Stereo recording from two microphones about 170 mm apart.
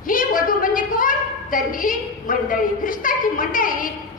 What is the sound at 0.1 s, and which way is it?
A woman's voice, 55° left (ahead or behind).